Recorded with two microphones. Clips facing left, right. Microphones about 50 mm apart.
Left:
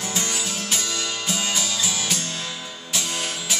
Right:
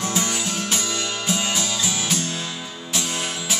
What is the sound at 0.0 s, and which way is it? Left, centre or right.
Music, centre.